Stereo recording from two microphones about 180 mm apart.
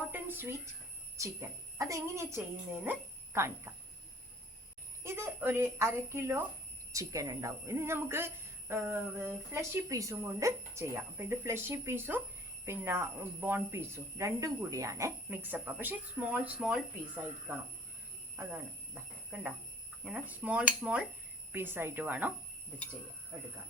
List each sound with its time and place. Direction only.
0.1 s a sound: 10° right (ahead or behind)
1.1 s speech: 15° right (ahead or behind)
5.0 s speech: 15° right (ahead or behind)
19.3 s speech: 10° right (ahead or behind)
23.3 s speech: 10° right (ahead or behind)